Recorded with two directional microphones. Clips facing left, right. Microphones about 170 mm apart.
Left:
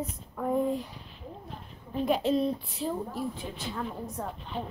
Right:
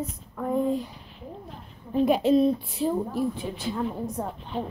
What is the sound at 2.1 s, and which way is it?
Speech, 10° right (ahead or behind).